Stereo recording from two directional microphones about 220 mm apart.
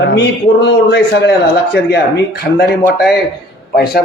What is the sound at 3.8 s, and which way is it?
Speech, 45° left (ahead or behind).